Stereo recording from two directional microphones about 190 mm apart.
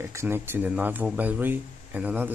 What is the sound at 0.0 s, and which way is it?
Speech, 15° right (ahead or behind).